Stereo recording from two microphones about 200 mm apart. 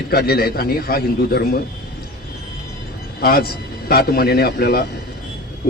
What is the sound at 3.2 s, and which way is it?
A man's voice, 50° left (ahead or behind).